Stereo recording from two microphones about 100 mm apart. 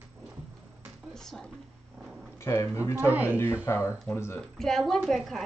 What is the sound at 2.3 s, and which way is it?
Speech, 30° left (ahead or behind).